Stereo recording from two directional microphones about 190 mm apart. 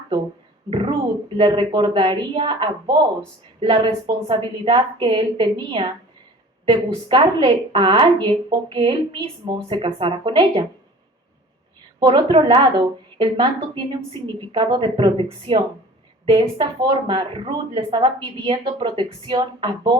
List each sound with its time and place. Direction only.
0.7 s a sound: 25° right (ahead or behind)
1.4 s speech: 25° right (ahead or behind)
11.9 s speech: 25° right (ahead or behind)